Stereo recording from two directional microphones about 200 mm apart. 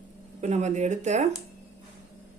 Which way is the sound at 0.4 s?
35° right (ahead or behind).